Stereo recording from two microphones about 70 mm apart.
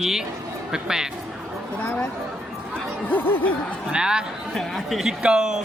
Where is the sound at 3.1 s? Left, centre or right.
Left.